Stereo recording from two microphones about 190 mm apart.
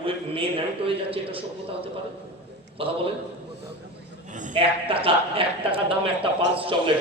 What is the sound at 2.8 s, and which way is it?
Speech, 30° right (ahead or behind).